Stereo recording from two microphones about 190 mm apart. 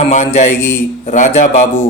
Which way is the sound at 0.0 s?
40° left (ahead or behind).